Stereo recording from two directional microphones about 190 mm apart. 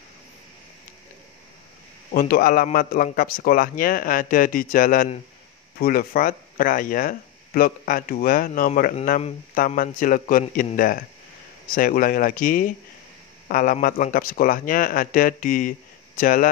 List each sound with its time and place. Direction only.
2.1 s speech: 50° left (ahead or behind)